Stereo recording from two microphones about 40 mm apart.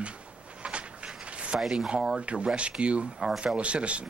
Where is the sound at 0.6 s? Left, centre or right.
Right.